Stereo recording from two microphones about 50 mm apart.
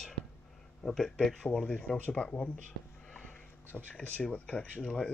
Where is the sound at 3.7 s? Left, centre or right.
Centre.